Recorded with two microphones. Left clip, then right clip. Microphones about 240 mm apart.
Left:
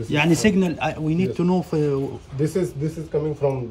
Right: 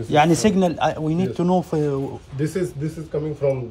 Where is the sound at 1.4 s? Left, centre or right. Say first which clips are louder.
Right 5 dB; right.